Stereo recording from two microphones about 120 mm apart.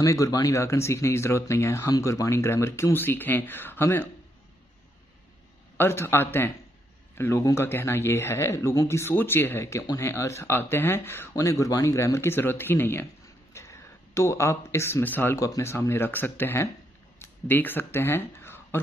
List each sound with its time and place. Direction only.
0.0 s speech: 25° left (ahead or behind)
5.8 s speech: 20° left (ahead or behind)